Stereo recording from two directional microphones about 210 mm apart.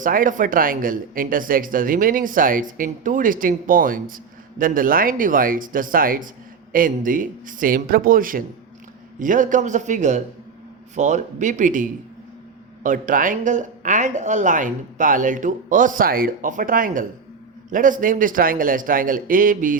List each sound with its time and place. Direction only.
0.0 s speech: 40° right (ahead or behind)